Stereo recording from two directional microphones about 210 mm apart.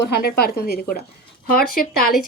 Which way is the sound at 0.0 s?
45° left (ahead or behind).